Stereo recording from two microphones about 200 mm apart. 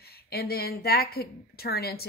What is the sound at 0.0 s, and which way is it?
A woman's voice, 50° left (ahead or behind).